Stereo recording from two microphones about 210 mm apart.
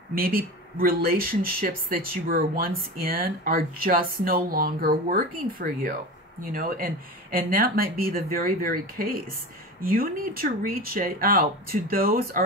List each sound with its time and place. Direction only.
0.1 s speech: 45° right (ahead or behind)